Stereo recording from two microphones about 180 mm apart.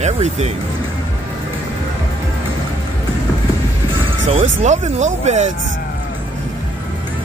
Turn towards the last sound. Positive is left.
turn(degrees=-40)  # may be behind; listen again after turning